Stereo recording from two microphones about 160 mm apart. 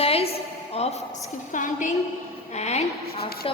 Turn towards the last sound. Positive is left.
turn(degrees=45)  # may be behind; listen again after turning